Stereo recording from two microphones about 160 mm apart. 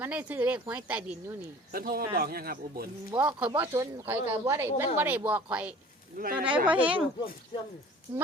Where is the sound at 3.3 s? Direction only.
10° right (ahead or behind).